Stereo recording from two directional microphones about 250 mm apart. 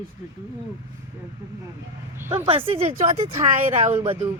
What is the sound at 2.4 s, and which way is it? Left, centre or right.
Speech, right.